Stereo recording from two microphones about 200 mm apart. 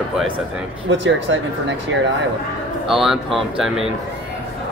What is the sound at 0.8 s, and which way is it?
Speech, 65° right (ahead or behind).